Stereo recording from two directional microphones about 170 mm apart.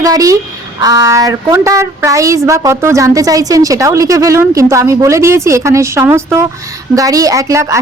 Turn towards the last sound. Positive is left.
turn(degrees=-20)  # may be behind; listen again after turning